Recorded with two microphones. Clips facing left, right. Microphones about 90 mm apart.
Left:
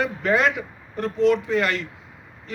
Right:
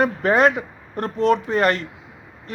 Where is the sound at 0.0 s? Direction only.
45° right (ahead or behind).